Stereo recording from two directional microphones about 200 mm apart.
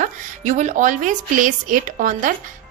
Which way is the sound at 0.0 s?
40° right (ahead or behind).